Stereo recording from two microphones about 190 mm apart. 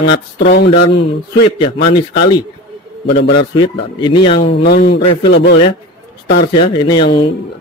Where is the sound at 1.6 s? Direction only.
25° left (ahead or behind).